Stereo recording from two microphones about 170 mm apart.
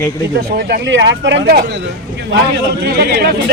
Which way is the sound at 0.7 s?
90° right.